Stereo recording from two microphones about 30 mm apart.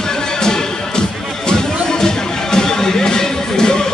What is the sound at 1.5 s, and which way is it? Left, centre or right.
Music, centre.